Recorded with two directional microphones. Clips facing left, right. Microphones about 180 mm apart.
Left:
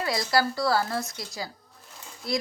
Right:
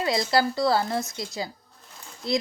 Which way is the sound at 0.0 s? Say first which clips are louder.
Right 2 dB; 25° right (ahead or behind).